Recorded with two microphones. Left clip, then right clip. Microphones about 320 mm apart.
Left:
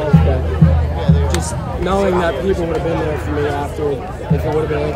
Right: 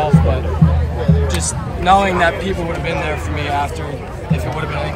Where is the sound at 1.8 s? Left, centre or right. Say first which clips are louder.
Right 5 dB; right.